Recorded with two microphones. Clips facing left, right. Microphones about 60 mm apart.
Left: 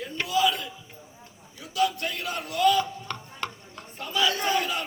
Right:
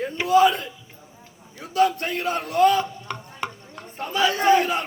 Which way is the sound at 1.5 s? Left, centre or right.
Right.